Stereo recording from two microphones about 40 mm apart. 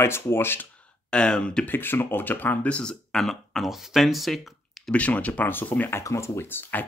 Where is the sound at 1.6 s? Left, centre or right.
Left.